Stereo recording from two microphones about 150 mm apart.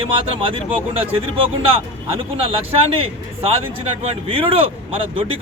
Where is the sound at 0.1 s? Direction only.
35° right (ahead or behind).